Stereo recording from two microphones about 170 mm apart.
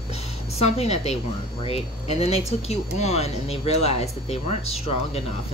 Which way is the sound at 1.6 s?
35° left (ahead or behind).